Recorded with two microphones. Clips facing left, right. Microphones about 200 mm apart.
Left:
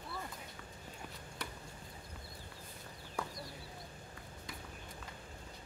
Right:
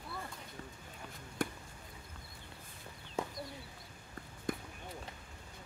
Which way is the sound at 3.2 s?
20° right (ahead or behind).